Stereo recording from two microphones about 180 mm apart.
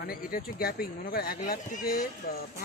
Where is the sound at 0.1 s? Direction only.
55° left (ahead or behind).